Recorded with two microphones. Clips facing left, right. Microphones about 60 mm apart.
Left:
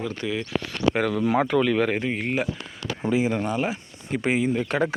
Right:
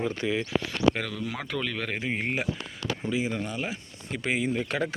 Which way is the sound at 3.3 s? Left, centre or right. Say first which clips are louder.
Left 7 dB; left.